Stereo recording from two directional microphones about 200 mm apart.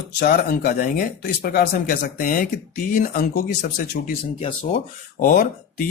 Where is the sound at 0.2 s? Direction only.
50° left (ahead or behind).